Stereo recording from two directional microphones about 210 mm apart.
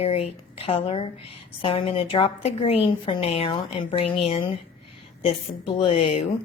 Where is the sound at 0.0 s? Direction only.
30° left (ahead or behind).